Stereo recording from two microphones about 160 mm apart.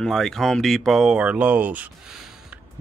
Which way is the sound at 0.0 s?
Centre (ahead or behind).